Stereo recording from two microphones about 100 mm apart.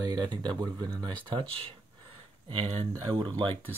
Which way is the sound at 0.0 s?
40° right (ahead or behind).